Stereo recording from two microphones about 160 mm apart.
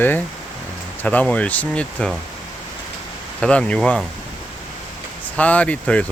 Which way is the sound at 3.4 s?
5° left (ahead or behind).